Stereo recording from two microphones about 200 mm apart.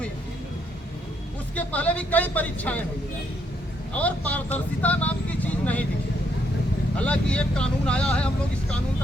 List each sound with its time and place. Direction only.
1.5 s speech: 5° left (ahead or behind)
3.9 s speech: 5° left (ahead or behind)
6.9 s speech: 5° left (ahead or behind)